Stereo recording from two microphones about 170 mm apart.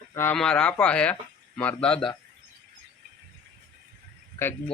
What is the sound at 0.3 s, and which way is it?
Speech, 5° left (ahead or behind).